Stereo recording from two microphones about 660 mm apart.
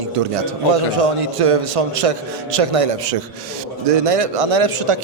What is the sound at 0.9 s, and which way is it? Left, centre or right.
A man's voice, right.